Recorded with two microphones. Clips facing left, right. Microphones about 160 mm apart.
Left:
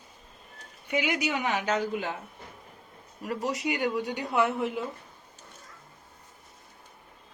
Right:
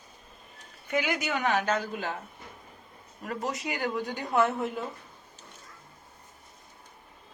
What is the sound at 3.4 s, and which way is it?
Speech, 75° left (ahead or behind).